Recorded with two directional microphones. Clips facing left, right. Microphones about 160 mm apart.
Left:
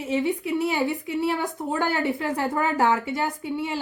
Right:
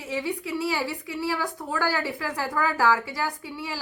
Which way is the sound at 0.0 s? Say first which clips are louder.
Left 5 dB; 25° left (ahead or behind).